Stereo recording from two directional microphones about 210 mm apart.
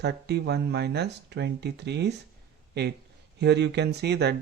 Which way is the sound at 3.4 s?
55° right (ahead or behind).